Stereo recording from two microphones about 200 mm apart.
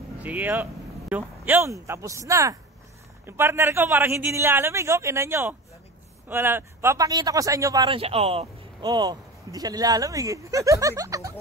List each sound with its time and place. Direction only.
0.2 s speech: 10° right (ahead or behind)